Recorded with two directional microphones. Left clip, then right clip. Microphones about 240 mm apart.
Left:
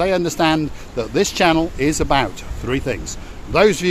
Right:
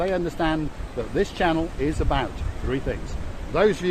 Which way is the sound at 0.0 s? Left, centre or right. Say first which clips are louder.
Left 7 dB; left.